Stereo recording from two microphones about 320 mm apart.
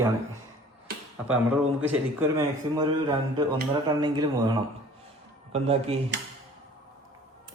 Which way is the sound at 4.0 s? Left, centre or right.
Centre.